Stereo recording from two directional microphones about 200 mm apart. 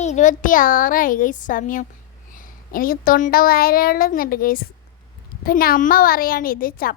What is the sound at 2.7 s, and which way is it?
A woman's voice, 45° left (ahead or behind).